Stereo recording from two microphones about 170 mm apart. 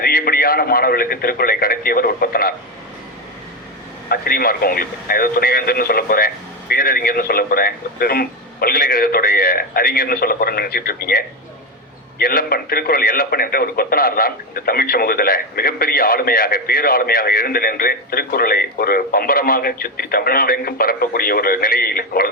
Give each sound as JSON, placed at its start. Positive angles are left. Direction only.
{"t": 0.0, "sound": "speech", "side_deg": 60}
{"t": 4.1, "sound": "speech", "side_deg": 60}
{"t": 12.2, "sound": "speech", "side_deg": 60}